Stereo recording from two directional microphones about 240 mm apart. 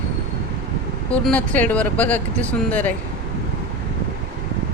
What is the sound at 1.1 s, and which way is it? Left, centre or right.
Speech, centre.